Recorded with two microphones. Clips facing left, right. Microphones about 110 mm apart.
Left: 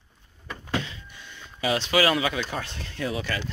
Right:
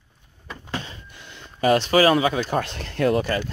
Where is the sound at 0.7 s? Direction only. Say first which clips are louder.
Left 3 dB; 40° right (ahead or behind).